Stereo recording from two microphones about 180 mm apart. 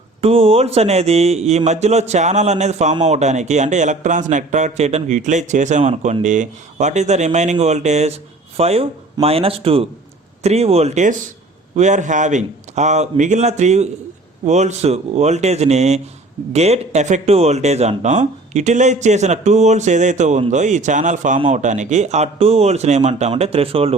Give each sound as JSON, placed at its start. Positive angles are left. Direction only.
{"t": 0.2, "sound": "speech", "side_deg": -30}